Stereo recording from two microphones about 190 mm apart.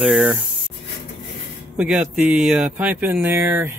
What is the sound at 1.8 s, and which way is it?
Speech, 5° right (ahead or behind).